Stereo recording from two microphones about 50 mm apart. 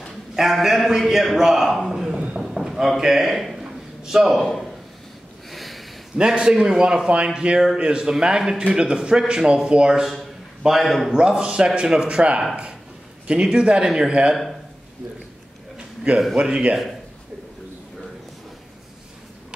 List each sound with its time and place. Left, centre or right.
0.4 s a man's voice: centre
2.1 s a sound: right
2.4 s a sound: centre
3.6 s a sound: centre
5.5 s sniff: centre
6.1 s a man's voice: centre
10.6 s a man's voice: centre
11.1 s a man's voice: centre
13.4 s a man's voice: centre
16.3 s a man's voice: centre